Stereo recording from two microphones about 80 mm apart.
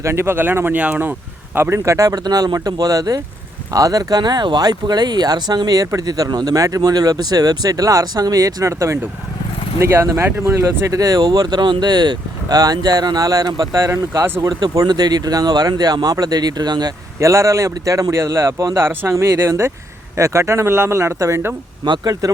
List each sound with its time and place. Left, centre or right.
0.0 s speech: right
1.8 s speech: right
13.7 s speech: right
14.8 s speech: right
17.2 s speech: right
21.8 s speech: right